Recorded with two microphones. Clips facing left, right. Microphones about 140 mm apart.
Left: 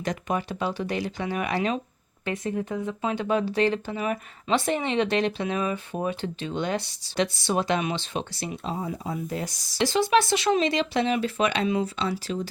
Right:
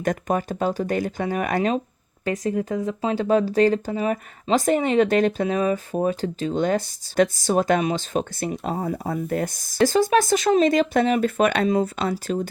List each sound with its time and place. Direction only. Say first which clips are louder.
0.0 s speech: right 5 dB; 45° right (ahead or behind)